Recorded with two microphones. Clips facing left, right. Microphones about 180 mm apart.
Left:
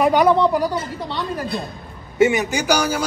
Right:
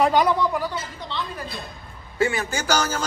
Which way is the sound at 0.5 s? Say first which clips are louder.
Left 6 dB; 35° left (ahead or behind).